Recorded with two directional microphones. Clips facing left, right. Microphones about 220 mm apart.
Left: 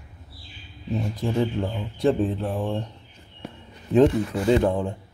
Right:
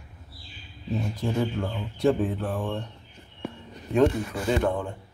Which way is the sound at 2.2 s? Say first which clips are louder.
Left 3 dB; 30° left (ahead or behind).